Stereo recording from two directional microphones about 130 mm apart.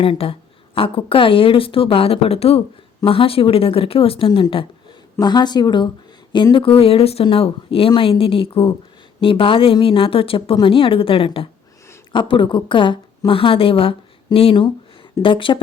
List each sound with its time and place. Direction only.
0.0 s a woman's voice: 45° left (ahead or behind)